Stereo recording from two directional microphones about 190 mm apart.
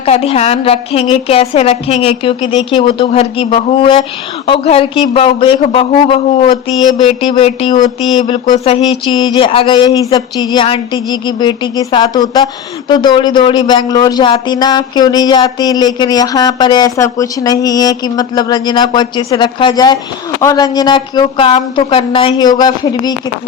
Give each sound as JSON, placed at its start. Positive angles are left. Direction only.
{"t": 0.0, "sound": "a woman's voice", "side_deg": 30}